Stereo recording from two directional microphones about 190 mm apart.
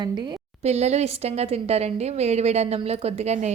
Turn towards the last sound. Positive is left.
turn(degrees=-35)  # may be behind; listen again after turning